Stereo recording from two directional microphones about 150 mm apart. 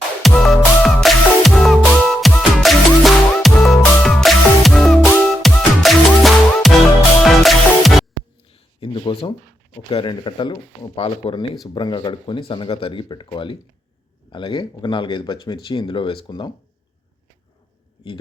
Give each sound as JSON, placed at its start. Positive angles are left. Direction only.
{"t": 0.2, "sound": "music", "side_deg": 0}
{"t": 8.5, "sound": "a sound", "side_deg": 35}
{"t": 9.9, "sound": "speech", "side_deg": 35}